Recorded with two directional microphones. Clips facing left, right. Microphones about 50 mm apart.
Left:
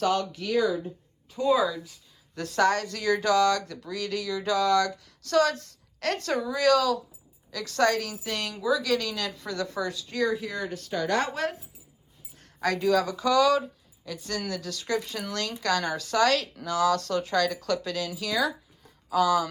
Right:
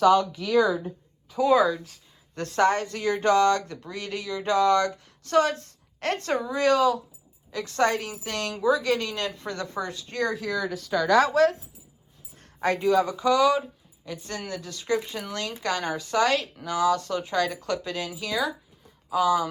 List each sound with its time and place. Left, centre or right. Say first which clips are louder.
1.4 s speech: right 4 dB; right
1.6 s speech: right 3 dB; right
8.2 s speech: right 4 dB; right
10.2 s speech: right 2 dB; right
11.3 s speech: right 10 dB; right
12.5 s speech: right 2 dB; right